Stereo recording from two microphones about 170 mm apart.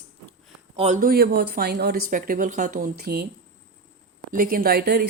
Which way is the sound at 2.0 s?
55° right (ahead or behind).